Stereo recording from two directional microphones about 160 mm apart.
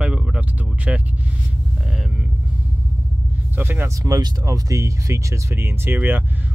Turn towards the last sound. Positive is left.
turn(degrees=-10)  # may be behind; listen again after turning